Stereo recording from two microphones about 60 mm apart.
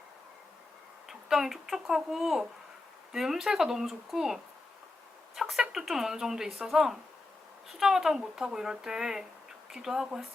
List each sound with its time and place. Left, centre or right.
1.0 s speech: centre